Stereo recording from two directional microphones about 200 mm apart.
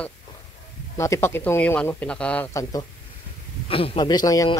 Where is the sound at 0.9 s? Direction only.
15° left (ahead or behind).